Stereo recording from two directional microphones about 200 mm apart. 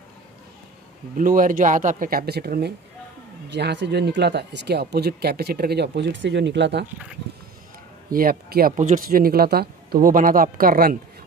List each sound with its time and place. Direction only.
1.1 s speech: 40° right (ahead or behind); by 6.9 s 60° right (ahead or behind)
8.1 s speech: 45° right (ahead or behind)